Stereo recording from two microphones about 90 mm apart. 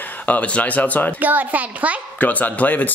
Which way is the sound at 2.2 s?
20° left (ahead or behind).